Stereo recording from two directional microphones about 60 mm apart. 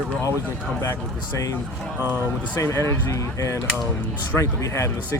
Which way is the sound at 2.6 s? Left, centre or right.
Left.